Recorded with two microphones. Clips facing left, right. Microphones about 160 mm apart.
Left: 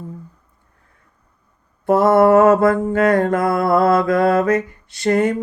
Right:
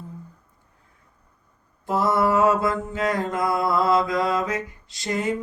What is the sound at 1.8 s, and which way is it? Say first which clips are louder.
Mantra: left 9 dB; 60° left (ahead or behind).